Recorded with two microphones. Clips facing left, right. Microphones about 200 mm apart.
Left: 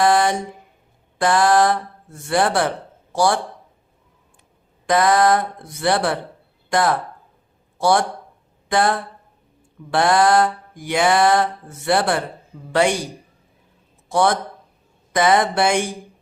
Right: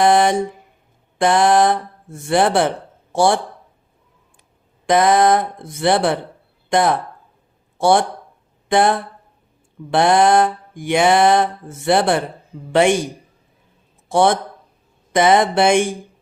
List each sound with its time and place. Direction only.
0.0 s mantra: 25° right (ahead or behind)
3.1 s speech: 25° right (ahead or behind)
4.9 s mantra: 20° right (ahead or behind)
6.7 s speech: 25° right (ahead or behind)
8.7 s mantra: 20° right (ahead or behind)
14.1 s mantra: 25° right (ahead or behind)